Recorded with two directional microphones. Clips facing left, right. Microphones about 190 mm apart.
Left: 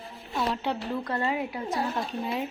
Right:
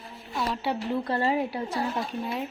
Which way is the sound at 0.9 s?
30° right (ahead or behind).